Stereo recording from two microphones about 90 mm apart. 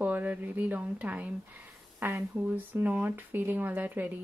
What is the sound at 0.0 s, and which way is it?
Speech, 20° right (ahead or behind).